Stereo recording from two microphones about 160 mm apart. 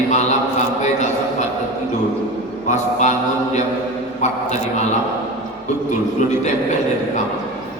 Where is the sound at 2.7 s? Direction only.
50° left (ahead or behind).